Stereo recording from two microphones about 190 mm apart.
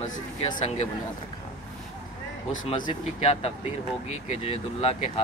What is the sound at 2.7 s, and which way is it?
Speech, 25° left (ahead or behind).